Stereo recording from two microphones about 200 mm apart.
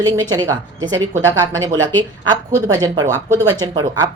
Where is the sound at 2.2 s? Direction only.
15° right (ahead or behind).